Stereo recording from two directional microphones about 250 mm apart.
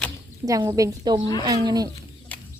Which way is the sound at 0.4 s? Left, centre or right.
Centre.